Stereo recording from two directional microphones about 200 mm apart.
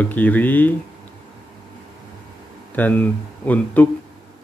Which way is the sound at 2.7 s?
10° left (ahead or behind).